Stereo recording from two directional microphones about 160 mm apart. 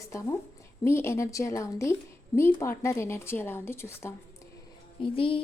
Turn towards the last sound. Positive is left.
turn(degrees=35)  # may be behind; listen again after turning